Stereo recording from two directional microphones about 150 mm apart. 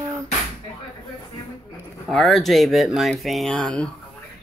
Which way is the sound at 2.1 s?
Centre (ahead or behind).